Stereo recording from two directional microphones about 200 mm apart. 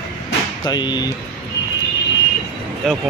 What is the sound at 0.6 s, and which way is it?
Speech, 20° left (ahead or behind).